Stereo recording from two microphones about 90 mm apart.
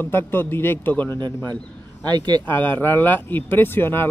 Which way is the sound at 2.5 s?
25° left (ahead or behind).